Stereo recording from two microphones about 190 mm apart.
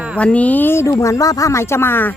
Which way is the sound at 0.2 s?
5° left (ahead or behind).